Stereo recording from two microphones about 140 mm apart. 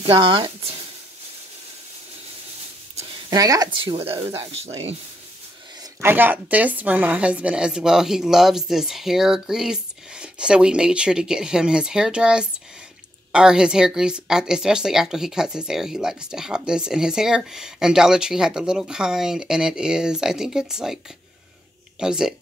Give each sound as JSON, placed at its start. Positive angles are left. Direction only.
{"t": 0.0, "sound": "speech", "side_deg": -40}
{"t": 3.3, "sound": "speech", "side_deg": -25}
{"t": 5.9, "sound": "speech", "side_deg": -15}
{"t": 22.0, "sound": "speech", "side_deg": -5}